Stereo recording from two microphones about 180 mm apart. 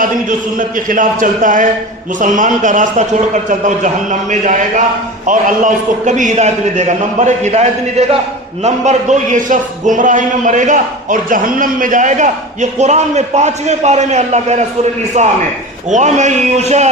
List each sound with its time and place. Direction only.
0.0 s a man's voice: 50° right (ahead or behind)